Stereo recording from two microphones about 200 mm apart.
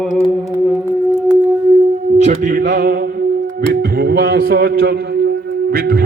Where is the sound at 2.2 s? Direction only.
40° right (ahead or behind).